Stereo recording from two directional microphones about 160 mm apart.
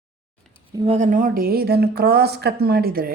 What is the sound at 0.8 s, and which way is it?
Speech, 45° right (ahead or behind).